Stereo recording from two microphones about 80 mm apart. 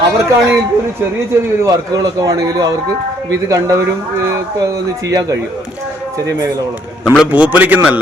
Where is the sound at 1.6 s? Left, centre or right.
Right.